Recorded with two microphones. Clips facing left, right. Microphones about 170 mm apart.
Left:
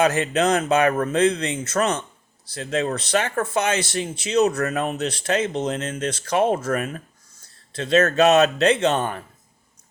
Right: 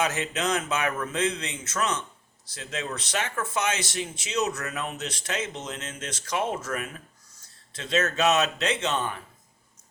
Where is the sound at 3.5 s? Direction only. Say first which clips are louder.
Left 5 dB; 35° left (ahead or behind).